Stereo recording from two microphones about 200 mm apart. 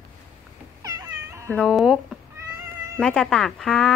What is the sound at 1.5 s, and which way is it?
Speech, 5° left (ahead or behind).